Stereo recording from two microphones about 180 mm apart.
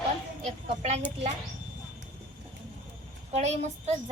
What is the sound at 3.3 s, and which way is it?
Speech, 35° right (ahead or behind).